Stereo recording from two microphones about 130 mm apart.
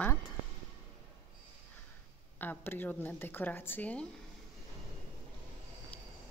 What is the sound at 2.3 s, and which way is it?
Speech, 15° left (ahead or behind).